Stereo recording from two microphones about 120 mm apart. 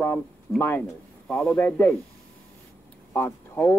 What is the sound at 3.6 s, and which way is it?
Speech, 15° left (ahead or behind).